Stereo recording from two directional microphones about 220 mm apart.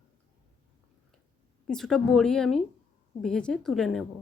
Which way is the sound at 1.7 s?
Centre (ahead or behind).